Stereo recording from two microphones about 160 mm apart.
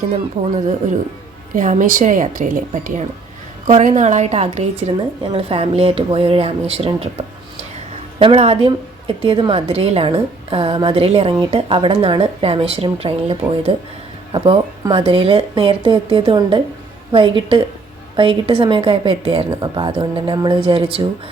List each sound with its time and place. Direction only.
1.5 s a woman's voice: 55° right (ahead or behind); by 7.1 s 35° right (ahead or behind)
8.2 s a woman's voice: 35° right (ahead or behind)